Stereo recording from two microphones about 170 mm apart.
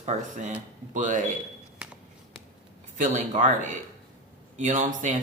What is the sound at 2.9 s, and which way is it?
A man's voice, 45° right (ahead or behind).